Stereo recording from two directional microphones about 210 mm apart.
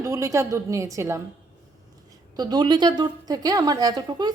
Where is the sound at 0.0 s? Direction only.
15° right (ahead or behind).